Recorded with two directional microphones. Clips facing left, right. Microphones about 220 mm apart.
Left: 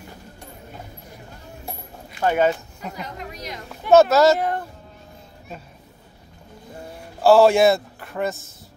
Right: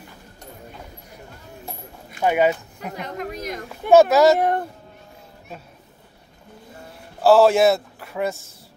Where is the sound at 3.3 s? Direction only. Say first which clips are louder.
Right 5 dB; 50° right (ahead or behind).